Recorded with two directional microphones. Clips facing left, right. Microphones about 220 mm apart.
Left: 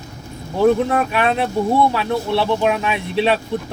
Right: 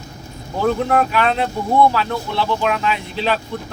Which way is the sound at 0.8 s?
20° left (ahead or behind).